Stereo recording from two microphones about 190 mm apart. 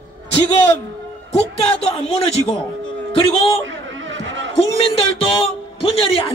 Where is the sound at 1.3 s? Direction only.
30° left (ahead or behind).